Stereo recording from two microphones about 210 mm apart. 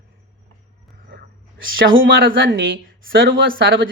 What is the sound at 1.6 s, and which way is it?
A woman's voice, 65° right (ahead or behind).